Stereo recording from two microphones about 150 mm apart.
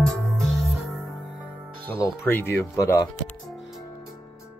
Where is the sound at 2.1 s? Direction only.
15° left (ahead or behind).